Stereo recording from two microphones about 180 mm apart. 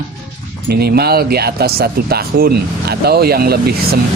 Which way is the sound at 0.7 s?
60° right (ahead or behind).